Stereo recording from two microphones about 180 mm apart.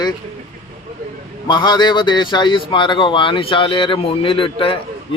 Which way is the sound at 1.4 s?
25° left (ahead or behind).